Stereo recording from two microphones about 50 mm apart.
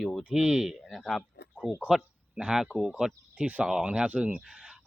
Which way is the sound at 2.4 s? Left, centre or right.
Centre.